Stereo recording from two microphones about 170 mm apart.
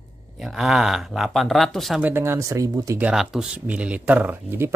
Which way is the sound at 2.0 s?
10° right (ahead or behind).